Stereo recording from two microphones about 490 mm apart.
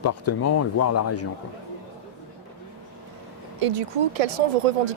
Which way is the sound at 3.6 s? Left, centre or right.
Right.